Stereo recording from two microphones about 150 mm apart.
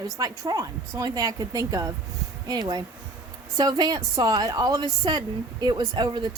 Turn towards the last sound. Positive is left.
turn(degrees=-30)  # may be behind; listen again after turning